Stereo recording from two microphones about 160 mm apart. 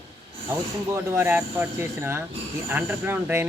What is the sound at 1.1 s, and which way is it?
Speech, 15° right (ahead or behind).